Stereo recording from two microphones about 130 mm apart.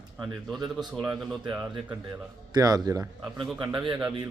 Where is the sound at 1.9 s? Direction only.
25° right (ahead or behind).